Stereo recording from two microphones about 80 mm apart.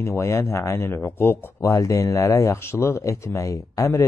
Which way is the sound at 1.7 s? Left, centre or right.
Left.